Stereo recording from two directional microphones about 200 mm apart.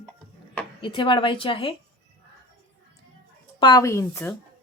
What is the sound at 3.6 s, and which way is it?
Speech, 20° left (ahead or behind).